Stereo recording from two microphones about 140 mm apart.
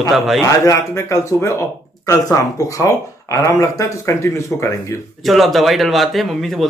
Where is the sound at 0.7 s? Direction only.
20° left (ahead or behind).